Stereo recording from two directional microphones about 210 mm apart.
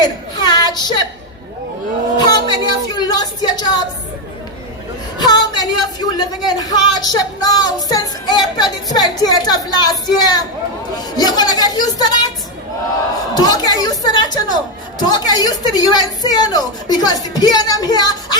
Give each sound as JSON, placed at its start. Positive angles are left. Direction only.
{"t": 0.0, "sound": "a sound", "side_deg": 20}
{"t": 2.2, "sound": "a woman's voice", "side_deg": 20}
{"t": 5.1, "sound": "speech", "side_deg": 20}
{"t": 13.3, "sound": "speech", "side_deg": 20}